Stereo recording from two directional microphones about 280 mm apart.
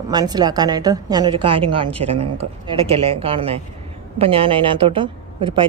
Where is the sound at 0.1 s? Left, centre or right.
Centre.